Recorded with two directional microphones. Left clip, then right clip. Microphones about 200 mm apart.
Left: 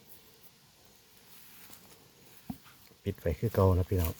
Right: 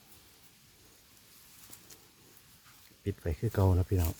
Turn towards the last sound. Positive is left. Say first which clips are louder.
# left 4 dB
turn(degrees=-10)  # may be behind; listen again after turning